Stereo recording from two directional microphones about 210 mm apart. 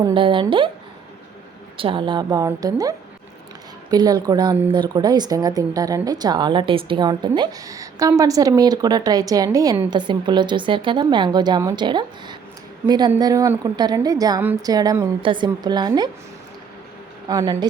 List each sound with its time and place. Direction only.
0.0 s a woman's voice: 25° right (ahead or behind)
1.7 s a woman's voice: 25° right (ahead or behind)
17.2 s a woman's voice: 20° right (ahead or behind)